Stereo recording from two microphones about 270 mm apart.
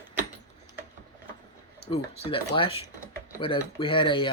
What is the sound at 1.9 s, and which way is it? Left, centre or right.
Speech, left.